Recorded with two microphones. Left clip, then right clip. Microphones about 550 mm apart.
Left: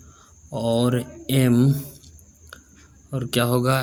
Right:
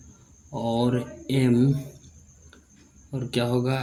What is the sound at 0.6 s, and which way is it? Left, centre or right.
Speech, left.